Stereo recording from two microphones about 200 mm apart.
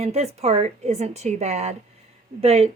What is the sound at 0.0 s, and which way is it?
A woman's voice, 35° right (ahead or behind).